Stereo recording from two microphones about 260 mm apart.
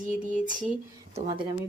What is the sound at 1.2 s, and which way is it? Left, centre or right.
Speech, centre.